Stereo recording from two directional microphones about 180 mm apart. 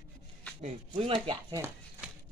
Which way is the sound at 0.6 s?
35° right (ahead or behind).